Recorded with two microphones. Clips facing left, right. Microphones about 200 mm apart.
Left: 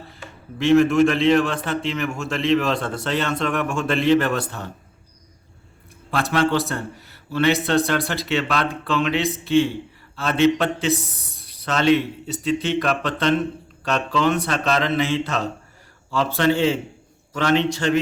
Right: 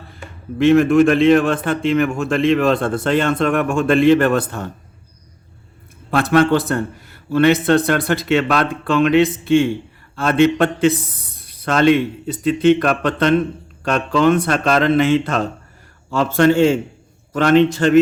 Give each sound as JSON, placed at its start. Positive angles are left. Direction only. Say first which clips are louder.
{"t": 0.6, "sound": "a man's voice", "louder": "right 4 dB", "side_deg": -55}
{"t": 6.1, "sound": "a man's voice", "louder": "right 6 dB", "side_deg": -55}